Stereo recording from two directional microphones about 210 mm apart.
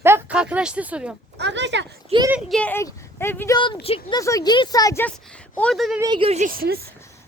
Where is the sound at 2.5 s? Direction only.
5° left (ahead or behind); by 4.2 s 25° left (ahead or behind).